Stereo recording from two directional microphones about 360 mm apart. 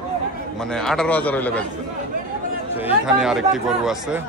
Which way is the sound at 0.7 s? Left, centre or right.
Centre.